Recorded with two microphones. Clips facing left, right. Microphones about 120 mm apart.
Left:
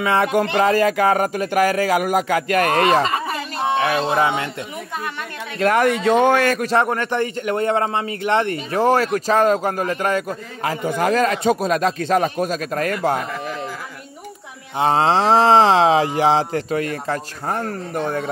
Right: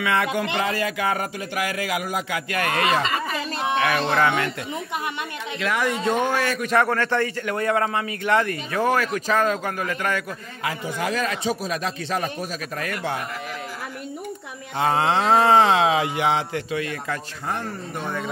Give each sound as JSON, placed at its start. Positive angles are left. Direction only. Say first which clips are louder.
{"t": 0.0, "sound": "a man's voice", "louder": "left 4 dB", "side_deg": 30}
{"t": 0.3, "sound": "speech", "louder": "left 7 dB", "side_deg": 45}
{"t": 3.6, "sound": "a sound", "louder": "left 3 dB", "side_deg": 25}
{"t": 4.0, "sound": "speech", "louder": "left 2 dB", "side_deg": 15}
{"t": 5.6, "sound": "speech", "louder": "left 8 dB", "side_deg": 50}
{"t": 6.0, "sound": "a man's voice", "louder": "left 7 dB", "side_deg": 75}
{"t": 6.6, "sound": "a man's voice", "louder": "left 2 dB", "side_deg": 25}
{"t": 14.8, "sound": "speech", "louder": "left 4 dB", "side_deg": 30}